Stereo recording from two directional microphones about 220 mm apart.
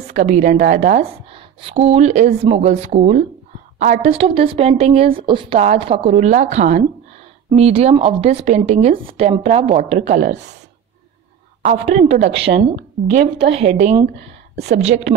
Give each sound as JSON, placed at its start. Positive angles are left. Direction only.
{"t": 0.0, "sound": "a woman's voice", "side_deg": -30}
{"t": 11.6, "sound": "speech", "side_deg": -30}
{"t": 14.5, "sound": "a woman's voice", "side_deg": -50}
{"t": 14.8, "sound": "speech", "side_deg": -30}